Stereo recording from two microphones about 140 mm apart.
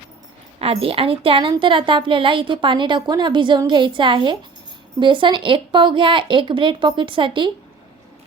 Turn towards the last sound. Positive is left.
turn(degrees=-35)  # may be behind; listen again after turning